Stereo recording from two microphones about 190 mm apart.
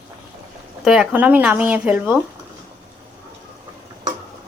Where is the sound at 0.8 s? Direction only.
5° right (ahead or behind).